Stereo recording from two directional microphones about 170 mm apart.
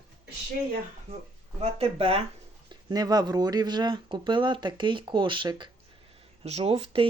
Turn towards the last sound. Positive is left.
turn(degrees=-35)  # may be behind; listen again after turning